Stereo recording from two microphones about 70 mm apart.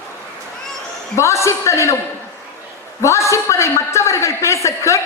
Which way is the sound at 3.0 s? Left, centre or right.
Left.